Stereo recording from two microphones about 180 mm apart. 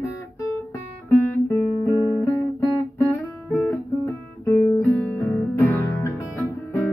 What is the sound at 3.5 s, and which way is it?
Guitar, 10° left (ahead or behind).